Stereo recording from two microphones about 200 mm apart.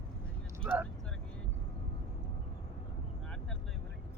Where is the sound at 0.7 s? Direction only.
10° right (ahead or behind).